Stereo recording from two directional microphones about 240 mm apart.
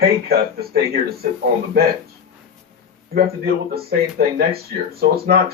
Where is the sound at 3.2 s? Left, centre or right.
Right.